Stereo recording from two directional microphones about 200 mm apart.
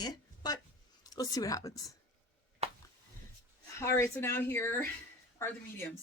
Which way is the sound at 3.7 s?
15° left (ahead or behind).